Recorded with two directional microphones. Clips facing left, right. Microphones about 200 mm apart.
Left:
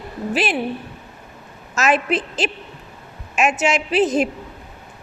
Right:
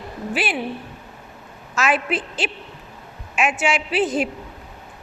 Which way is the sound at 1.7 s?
40° left (ahead or behind).